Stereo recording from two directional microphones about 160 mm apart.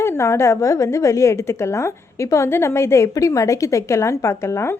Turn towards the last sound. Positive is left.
turn(degrees=15)  # may be behind; listen again after turning